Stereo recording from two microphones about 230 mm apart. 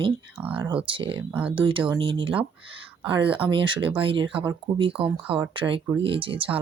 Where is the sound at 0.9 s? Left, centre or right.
Right.